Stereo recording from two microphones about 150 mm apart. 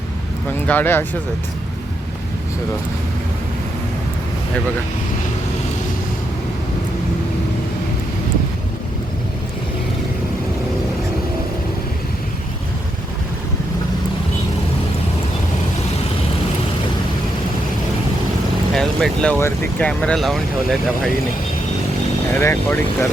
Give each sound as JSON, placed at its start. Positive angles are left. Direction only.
{"t": 0.7, "sound": "speech", "side_deg": 15}
{"t": 18.7, "sound": "speech", "side_deg": 5}
{"t": 19.4, "sound": "speech", "side_deg": 15}
{"t": 19.9, "sound": "speech", "side_deg": 5}
{"t": 22.4, "sound": "speech", "side_deg": 15}